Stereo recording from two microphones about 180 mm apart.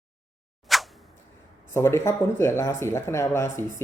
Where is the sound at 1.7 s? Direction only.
15° left (ahead or behind).